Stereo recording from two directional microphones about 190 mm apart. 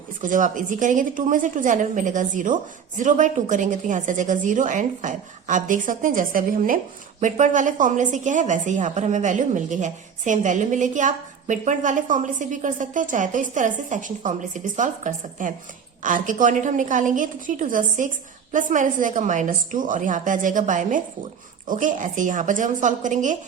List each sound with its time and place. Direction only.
0.2 s a woman's voice: 45° right (ahead or behind)